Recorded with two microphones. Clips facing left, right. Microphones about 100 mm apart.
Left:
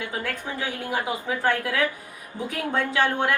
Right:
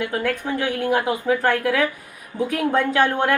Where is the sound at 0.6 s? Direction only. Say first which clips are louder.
Right 7 dB; 60° right (ahead or behind).